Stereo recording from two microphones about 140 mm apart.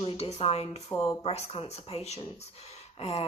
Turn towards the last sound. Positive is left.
turn(degrees=45)  # may be behind; listen again after turning